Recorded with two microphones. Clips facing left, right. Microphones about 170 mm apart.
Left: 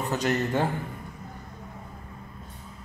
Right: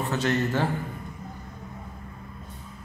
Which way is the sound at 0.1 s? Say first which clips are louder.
Even; 15° left (ahead or behind).